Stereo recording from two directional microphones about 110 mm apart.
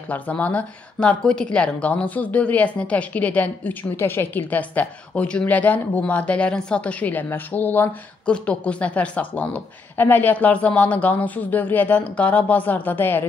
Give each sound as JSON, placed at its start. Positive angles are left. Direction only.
{"t": 0.1, "sound": "a woman's voice", "side_deg": 15}